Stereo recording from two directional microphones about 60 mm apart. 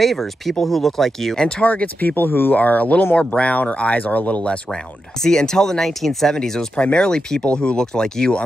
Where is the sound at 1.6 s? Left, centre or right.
Left.